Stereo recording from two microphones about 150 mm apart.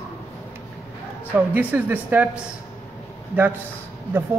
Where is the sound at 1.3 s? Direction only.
10° right (ahead or behind).